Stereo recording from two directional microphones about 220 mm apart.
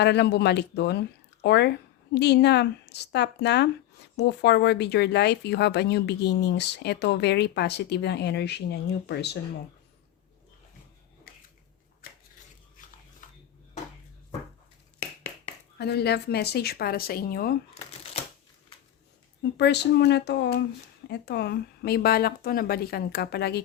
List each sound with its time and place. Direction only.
0.0 s speech: 50° left (ahead or behind)
15.8 s speech: 45° left (ahead or behind)
19.4 s speech: 50° left (ahead or behind)